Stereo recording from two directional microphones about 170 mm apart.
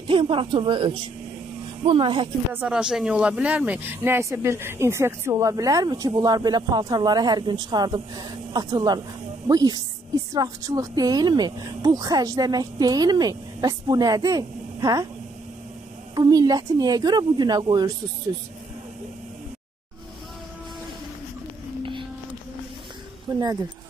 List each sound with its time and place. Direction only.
0.0 s speech: 30° right (ahead or behind)
2.5 s speech: 5° right (ahead or behind); by 15.0 s 20° right (ahead or behind)
16.2 s speech: 20° right (ahead or behind)